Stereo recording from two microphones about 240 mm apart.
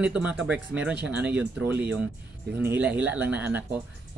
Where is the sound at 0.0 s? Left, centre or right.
Centre.